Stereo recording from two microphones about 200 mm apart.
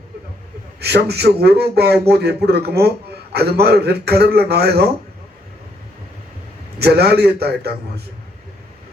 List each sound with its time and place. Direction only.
0.8 s a man's voice: 55° right (ahead or behind)
6.7 s a man's voice: 55° right (ahead or behind)